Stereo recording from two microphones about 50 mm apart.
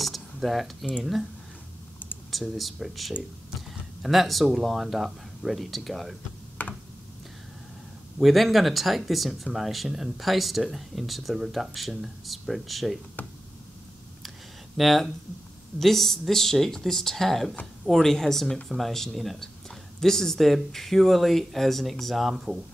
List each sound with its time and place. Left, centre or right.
0.0 s cutlery: centre
2.3 s speech: centre
6.6 s a sound: left
8.2 s speech: centre
14.8 s speech: centre